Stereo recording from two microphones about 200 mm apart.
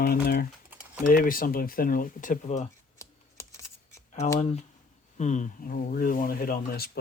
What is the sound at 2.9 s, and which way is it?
Computer keyboard, 15° left (ahead or behind).